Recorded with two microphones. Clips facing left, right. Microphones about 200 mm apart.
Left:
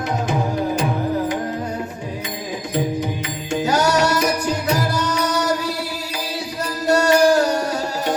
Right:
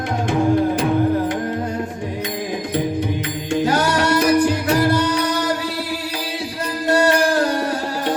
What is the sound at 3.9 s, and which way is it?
Music, 55° right (ahead or behind).